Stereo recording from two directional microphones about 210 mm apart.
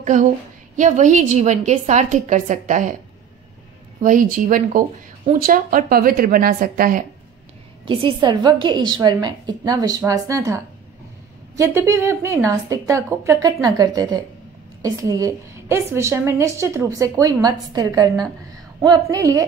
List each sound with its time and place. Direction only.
0.0 s a woman's voice: 35° right (ahead or behind)
4.0 s a woman's voice: 40° right (ahead or behind)
7.8 s a woman's voice: 25° right (ahead or behind)